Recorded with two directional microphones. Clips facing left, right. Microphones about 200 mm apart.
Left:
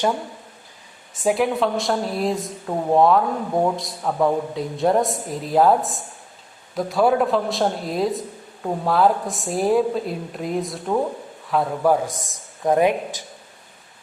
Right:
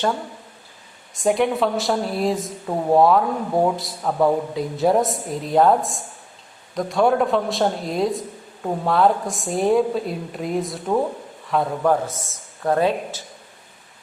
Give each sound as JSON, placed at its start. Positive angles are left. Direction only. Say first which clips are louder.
{"t": 1.2, "sound": "a woman's voice", "louder": "right 1 dB", "side_deg": 5}